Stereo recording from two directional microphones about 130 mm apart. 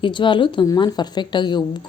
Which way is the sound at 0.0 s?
40° left (ahead or behind).